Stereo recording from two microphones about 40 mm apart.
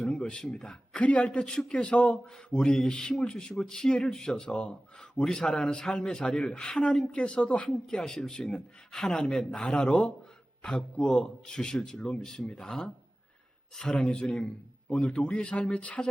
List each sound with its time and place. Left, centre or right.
0.0 s a man's voice: left
0.9 s speech: left
1.3 s a man's voice: centre